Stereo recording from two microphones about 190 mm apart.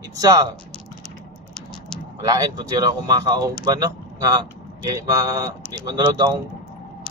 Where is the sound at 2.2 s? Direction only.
20° right (ahead or behind).